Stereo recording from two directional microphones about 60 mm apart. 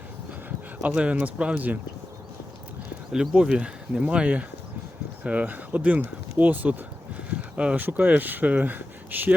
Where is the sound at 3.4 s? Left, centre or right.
Centre.